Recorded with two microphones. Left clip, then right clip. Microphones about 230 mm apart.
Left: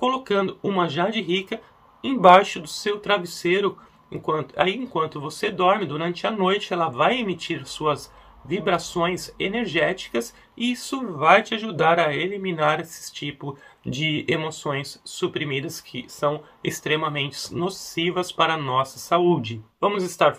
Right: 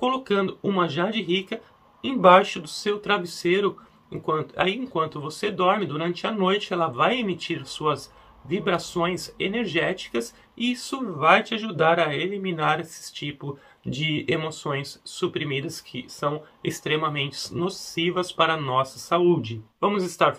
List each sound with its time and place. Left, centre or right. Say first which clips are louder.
0.0 s speech: left 1 dB; centre